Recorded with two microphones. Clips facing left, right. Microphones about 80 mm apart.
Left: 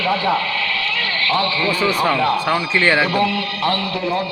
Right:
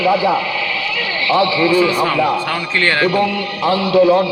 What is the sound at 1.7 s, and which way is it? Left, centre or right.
A man's voice, centre.